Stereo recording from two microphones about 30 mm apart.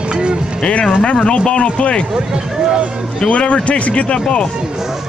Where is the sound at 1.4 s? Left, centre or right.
Left.